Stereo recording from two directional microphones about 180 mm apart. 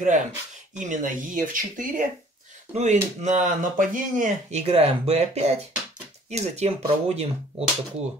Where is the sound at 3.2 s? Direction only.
40° right (ahead or behind).